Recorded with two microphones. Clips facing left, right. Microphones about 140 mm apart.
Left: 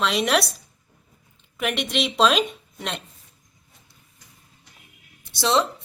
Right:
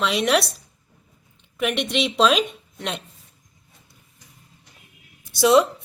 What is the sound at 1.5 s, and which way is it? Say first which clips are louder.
A woman's voice: right 2 dB; centre (ahead or behind).